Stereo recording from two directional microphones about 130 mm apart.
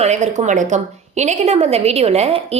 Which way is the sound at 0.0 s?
60° right (ahead or behind).